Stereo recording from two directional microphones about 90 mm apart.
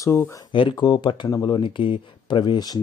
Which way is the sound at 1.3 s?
45° left (ahead or behind).